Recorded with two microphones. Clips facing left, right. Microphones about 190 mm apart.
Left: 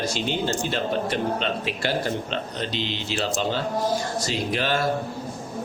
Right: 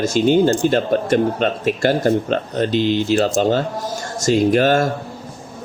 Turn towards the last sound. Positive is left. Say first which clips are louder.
# right 10 dB
turn(degrees=-45)  # may be behind; listen again after turning